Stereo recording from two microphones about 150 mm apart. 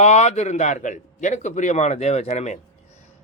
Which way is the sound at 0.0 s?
50° left (ahead or behind).